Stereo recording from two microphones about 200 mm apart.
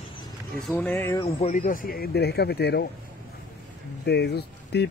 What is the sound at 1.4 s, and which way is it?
Speech, 40° left (ahead or behind).